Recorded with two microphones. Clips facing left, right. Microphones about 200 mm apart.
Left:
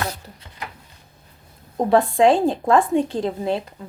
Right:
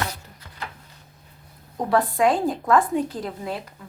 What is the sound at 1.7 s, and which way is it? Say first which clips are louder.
A woman's voice: left 5 dB; 25° left (ahead or behind).